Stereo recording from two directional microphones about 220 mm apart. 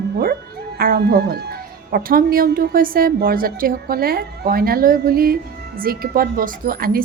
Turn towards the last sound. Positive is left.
turn(degrees=-40)  # may be behind; listen again after turning